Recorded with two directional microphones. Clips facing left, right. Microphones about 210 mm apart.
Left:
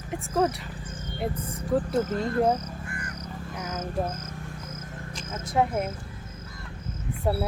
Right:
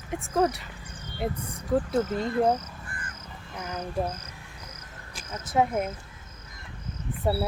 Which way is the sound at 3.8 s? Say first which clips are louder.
Even; 45° left (ahead or behind).